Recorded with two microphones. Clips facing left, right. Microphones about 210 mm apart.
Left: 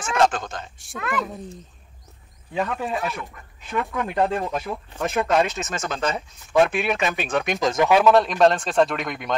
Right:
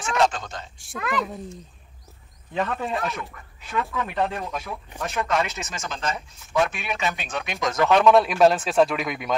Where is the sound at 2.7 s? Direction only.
Centre (ahead or behind).